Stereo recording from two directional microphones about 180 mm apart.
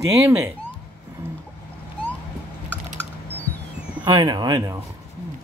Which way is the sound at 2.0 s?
30° left (ahead or behind).